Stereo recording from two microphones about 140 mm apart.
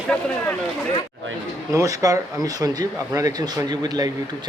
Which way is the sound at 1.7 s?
25° right (ahead or behind).